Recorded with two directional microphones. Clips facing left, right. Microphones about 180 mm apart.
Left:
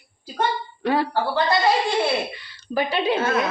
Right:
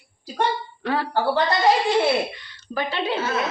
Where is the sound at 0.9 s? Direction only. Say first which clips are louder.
Left 3 dB; 10° left (ahead or behind).